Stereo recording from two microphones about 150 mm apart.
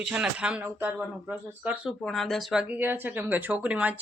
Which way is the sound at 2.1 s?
Centre (ahead or behind).